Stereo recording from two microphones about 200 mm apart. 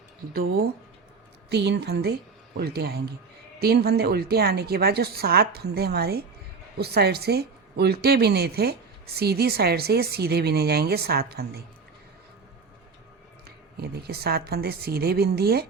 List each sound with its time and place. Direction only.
1.5 s a woman's voice: 60° right (ahead or behind)
13.8 s speech: 50° right (ahead or behind)